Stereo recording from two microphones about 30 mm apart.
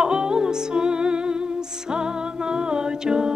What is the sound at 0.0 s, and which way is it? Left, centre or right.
Music, right.